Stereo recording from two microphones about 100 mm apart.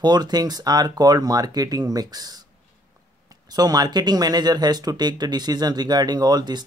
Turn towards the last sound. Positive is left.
turn(degrees=-45)  # may be behind; listen again after turning